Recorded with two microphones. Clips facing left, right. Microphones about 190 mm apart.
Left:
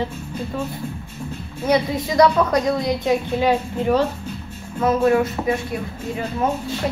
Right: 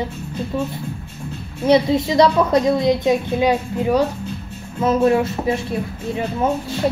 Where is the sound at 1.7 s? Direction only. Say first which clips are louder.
Right 5 dB; 25° right (ahead or behind).